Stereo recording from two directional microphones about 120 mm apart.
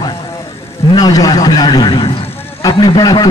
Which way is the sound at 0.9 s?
30° left (ahead or behind).